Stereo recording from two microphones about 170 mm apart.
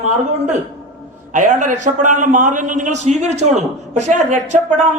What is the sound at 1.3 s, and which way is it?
A man's voice, 45° right (ahead or behind).